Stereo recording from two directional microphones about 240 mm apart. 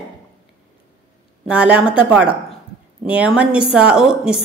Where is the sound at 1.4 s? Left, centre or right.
Centre.